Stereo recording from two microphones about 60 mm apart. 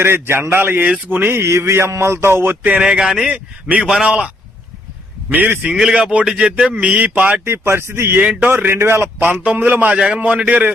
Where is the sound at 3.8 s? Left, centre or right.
Centre.